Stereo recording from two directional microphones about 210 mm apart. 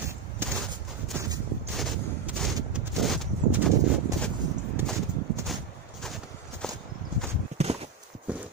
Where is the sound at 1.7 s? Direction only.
Centre (ahead or behind).